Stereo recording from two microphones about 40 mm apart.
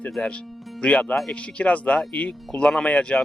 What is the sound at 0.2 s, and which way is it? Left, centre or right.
Speech, left.